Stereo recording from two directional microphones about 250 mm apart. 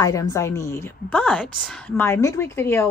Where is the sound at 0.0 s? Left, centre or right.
Centre.